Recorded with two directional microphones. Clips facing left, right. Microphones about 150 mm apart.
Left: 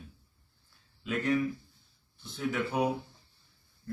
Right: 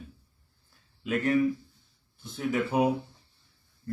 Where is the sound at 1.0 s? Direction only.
50° right (ahead or behind).